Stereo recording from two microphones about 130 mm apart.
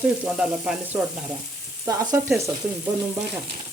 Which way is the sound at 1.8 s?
25° right (ahead or behind).